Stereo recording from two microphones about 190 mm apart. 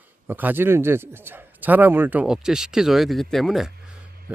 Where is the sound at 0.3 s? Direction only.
10° right (ahead or behind).